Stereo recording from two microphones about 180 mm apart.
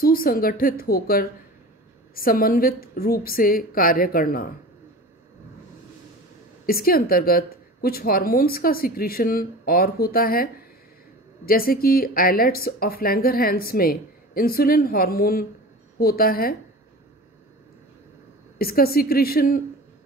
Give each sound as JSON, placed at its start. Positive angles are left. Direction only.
{"t": 0.0, "sound": "a woman's voice", "side_deg": 55}
{"t": 6.6, "sound": "speech", "side_deg": 55}
{"t": 18.6, "sound": "speech", "side_deg": 55}